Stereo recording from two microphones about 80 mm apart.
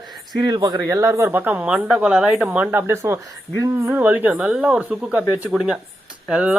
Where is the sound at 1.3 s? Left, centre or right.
Right.